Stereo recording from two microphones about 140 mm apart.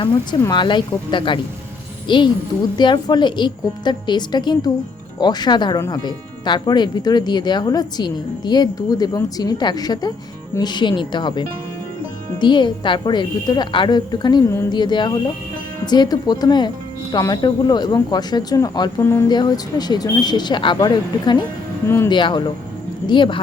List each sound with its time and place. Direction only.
0.0 s speech: 30° left (ahead or behind)
21.8 s speech: 15° left (ahead or behind)
22.1 s speech: 35° left (ahead or behind)